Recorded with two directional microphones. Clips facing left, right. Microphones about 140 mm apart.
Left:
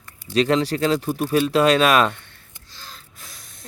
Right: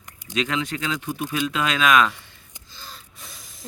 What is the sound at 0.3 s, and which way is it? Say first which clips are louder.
Speech: left 7 dB; 35° left (ahead or behind).